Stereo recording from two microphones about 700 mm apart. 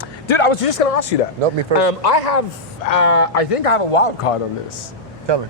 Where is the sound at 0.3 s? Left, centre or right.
Left.